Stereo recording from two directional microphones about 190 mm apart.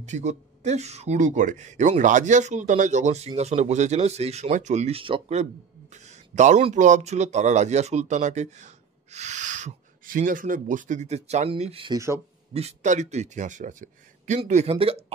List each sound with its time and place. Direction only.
0.0 s speech: 40° right (ahead or behind)